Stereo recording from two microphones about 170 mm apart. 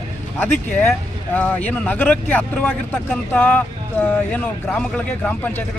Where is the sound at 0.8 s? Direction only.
10° left (ahead or behind).